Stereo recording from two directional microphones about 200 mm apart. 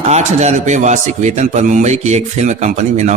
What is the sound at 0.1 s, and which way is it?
A man's voice, 35° right (ahead or behind).